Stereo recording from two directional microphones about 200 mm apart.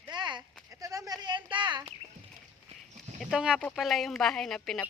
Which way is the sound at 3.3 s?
5° right (ahead or behind).